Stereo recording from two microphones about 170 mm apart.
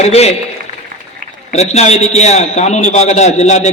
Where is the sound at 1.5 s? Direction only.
40° left (ahead or behind).